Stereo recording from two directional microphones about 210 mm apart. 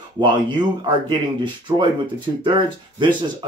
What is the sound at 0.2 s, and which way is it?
Speech, 20° right (ahead or behind).